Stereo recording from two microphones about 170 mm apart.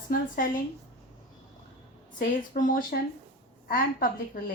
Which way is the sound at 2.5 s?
55° left (ahead or behind).